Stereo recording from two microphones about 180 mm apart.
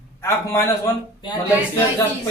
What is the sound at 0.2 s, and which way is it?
Speech, 15° left (ahead or behind).